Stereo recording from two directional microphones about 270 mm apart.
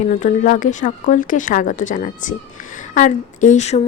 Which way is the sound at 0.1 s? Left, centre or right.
Left.